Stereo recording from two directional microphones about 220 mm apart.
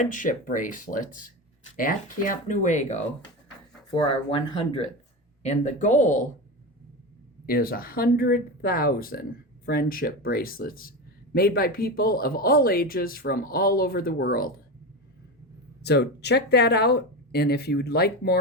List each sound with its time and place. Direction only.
0.0 s speech: 35° left (ahead or behind)
3.9 s speech: 25° left (ahead or behind)
7.4 s speech: 40° left (ahead or behind)
15.8 s speech: 50° left (ahead or behind)